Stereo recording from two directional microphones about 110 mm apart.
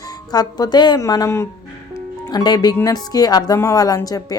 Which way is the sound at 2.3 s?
40° left (ahead or behind).